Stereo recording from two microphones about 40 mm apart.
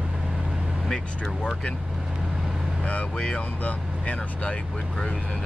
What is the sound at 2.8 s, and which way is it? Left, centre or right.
Speech, left.